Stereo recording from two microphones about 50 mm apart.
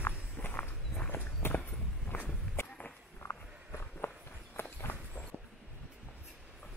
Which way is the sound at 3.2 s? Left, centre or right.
Left.